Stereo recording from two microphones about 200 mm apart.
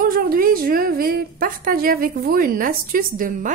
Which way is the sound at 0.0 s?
45° right (ahead or behind).